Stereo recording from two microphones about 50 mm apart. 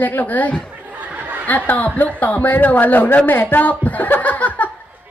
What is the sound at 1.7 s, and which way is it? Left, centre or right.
Speech, left.